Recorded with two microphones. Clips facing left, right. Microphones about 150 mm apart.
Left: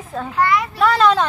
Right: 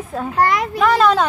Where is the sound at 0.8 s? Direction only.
5° right (ahead or behind).